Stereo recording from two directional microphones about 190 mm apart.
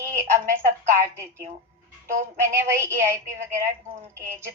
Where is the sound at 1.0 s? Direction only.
15° right (ahead or behind).